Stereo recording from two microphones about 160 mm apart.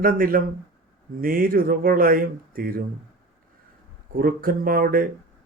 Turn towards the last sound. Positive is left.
turn(degrees=-65)  # may be behind; listen again after turning